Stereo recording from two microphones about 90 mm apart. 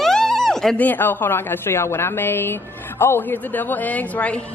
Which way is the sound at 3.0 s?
25° left (ahead or behind).